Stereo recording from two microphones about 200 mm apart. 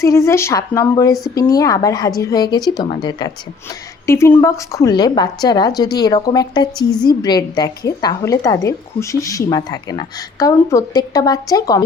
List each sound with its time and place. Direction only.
0.0 s a woman's voice: 15° left (ahead or behind)